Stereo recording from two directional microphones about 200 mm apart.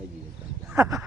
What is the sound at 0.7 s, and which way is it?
Speech, 15° right (ahead or behind).